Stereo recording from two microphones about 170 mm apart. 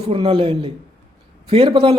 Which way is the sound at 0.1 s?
30° right (ahead or behind).